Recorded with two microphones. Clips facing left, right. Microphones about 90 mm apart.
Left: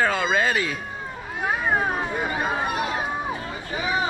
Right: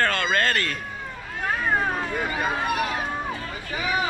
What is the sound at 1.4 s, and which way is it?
Cat, 15° left (ahead or behind).